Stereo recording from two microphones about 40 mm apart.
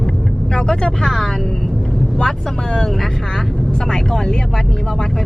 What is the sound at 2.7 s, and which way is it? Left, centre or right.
Speech, centre.